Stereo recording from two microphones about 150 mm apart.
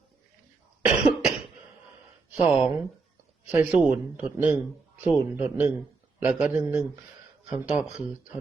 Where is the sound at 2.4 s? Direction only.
5° right (ahead or behind).